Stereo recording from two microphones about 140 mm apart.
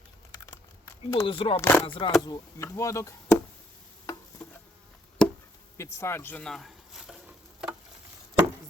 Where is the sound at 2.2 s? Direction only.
25° left (ahead or behind).